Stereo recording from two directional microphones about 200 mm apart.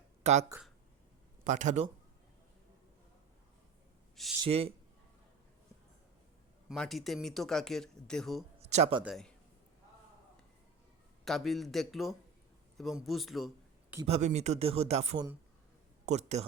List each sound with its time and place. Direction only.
0.2 s speech: 35° right (ahead or behind)
1.5 s speech: 35° right (ahead or behind)
4.4 s speech: 30° right (ahead or behind)
6.7 s speech: centre (ahead or behind)
8.5 s a sound: 30° right (ahead or behind)
9.0 s speech: centre (ahead or behind)
11.3 s a man's voice: centre (ahead or behind)
14.1 s speech: 35° right (ahead or behind)